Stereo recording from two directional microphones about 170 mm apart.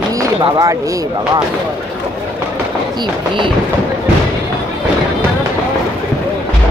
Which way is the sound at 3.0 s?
30° right (ahead or behind).